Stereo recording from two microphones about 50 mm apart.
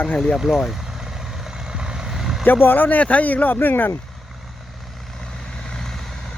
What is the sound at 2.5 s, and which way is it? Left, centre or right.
Speech, left.